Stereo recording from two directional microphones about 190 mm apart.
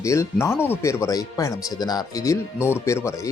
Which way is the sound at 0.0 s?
15° left (ahead or behind).